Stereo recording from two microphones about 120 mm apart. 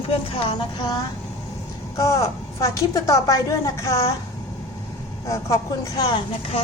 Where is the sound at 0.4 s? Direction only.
35° left (ahead or behind).